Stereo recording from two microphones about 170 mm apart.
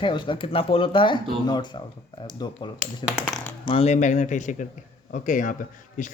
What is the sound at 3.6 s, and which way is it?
Speech, 35° left (ahead or behind).